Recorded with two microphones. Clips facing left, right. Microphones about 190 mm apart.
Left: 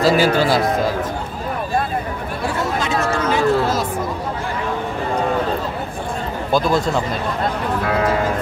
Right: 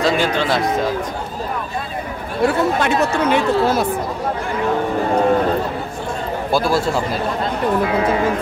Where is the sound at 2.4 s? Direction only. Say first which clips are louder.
Right 6 dB; 60° right (ahead or behind).